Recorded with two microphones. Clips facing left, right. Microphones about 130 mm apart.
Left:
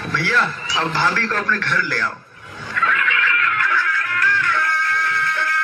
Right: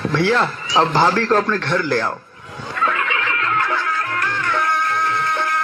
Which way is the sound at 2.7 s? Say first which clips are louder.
Right 1 dB; 30° right (ahead or behind).